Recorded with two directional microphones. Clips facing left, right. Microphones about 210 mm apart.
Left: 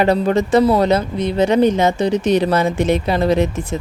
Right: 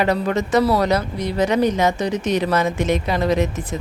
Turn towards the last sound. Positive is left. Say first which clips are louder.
# left 3 dB
turn(degrees=30)  # may be behind; listen again after turning